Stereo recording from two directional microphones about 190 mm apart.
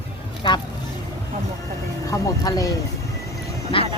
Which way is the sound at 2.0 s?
20° left (ahead or behind).